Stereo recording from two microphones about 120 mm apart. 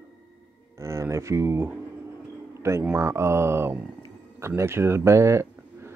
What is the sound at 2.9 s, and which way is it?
Speech, 20° right (ahead or behind).